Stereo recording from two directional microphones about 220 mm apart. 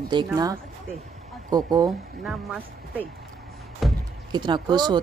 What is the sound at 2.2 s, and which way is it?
Speech, 5° right (ahead or behind).